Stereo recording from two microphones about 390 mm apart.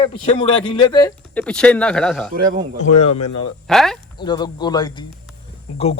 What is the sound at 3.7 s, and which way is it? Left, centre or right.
Speech, centre.